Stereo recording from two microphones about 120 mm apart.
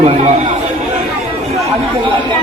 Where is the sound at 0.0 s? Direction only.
75° right (ahead or behind).